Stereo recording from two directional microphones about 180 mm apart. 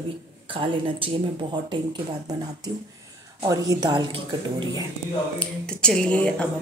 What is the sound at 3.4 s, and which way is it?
Speech, 20° right (ahead or behind).